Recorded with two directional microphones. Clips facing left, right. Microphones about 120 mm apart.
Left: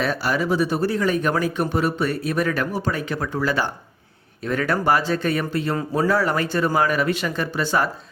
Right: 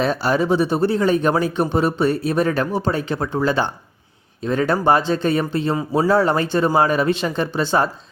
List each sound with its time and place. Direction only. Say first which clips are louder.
0.0 s speech: right 4 dB; 25° right (ahead or behind)